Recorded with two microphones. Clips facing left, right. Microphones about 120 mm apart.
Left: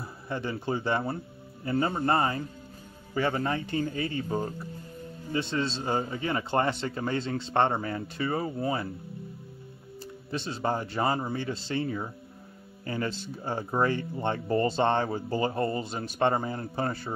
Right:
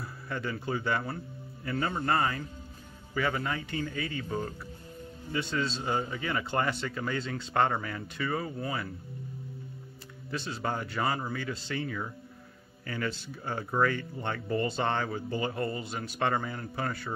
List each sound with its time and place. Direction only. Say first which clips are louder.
0.0 s speech: left 2 dB; 25° left (ahead or behind)
10.3 s speech: left 3 dB; 30° left (ahead or behind)